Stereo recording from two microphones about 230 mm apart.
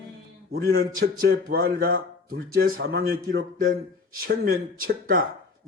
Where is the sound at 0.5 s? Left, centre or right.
Right.